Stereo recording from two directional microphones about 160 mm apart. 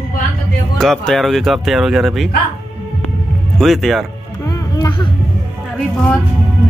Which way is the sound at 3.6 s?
Centre (ahead or behind).